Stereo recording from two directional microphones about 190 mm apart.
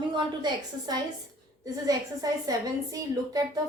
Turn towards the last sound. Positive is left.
turn(degrees=-20)  # may be behind; listen again after turning